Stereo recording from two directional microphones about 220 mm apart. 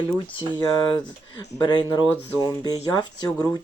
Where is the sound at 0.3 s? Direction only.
20° left (ahead or behind).